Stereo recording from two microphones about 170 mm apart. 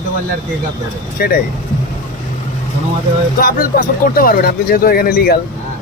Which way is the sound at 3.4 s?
55° left (ahead or behind).